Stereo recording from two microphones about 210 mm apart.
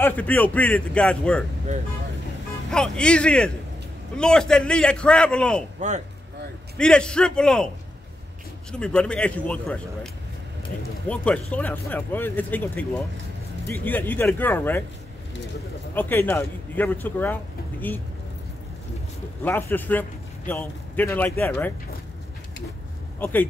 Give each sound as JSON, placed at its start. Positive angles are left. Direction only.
{"t": 0.0, "sound": "a man's voice", "side_deg": 10}
{"t": 2.7, "sound": "a man's voice", "side_deg": 5}
{"t": 5.8, "sound": "speech", "side_deg": -35}
{"t": 6.8, "sound": "a man's voice", "side_deg": 5}
{"t": 8.7, "sound": "a man's voice", "side_deg": 5}
{"t": 11.1, "sound": "a man's voice", "side_deg": 5}
{"t": 15.9, "sound": "speech", "side_deg": 10}
{"t": 19.4, "sound": "a man's voice", "side_deg": 10}
{"t": 23.1, "sound": "speech", "side_deg": 10}